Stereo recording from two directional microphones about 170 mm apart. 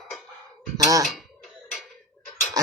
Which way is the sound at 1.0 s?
Centre (ahead or behind).